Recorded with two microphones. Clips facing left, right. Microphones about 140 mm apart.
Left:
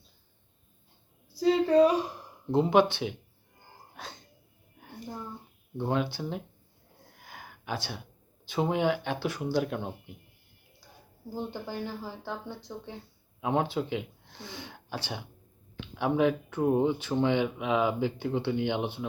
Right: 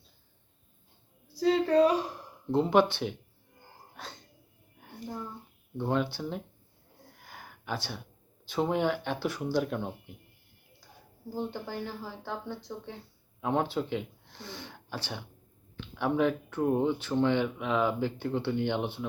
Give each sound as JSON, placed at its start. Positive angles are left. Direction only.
{"t": 1.4, "sound": "speech", "side_deg": 5}
{"t": 3.9, "sound": "music", "side_deg": 10}
{"t": 4.8, "sound": "a sound", "side_deg": 5}
{"t": 5.7, "sound": "speech", "side_deg": 5}
{"t": 7.2, "sound": "a sound", "side_deg": 5}
{"t": 8.4, "sound": "speech", "side_deg": 10}
{"t": 11.3, "sound": "speech", "side_deg": 5}